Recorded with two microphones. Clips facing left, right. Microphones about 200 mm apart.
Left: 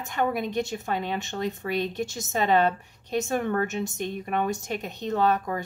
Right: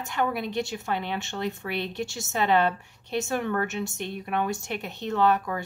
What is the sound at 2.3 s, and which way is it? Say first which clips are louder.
Speech: left 1 dB; 45° left (ahead or behind).